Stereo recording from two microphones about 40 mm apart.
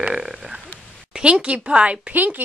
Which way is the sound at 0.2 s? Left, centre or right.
Centre.